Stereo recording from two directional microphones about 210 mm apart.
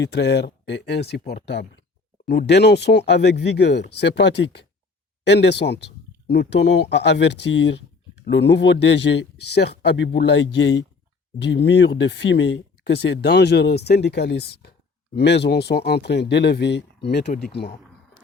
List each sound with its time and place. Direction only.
0.0 s speech: 55° left (ahead or behind)